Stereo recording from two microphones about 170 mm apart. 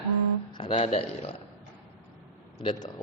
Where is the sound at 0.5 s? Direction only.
30° left (ahead or behind).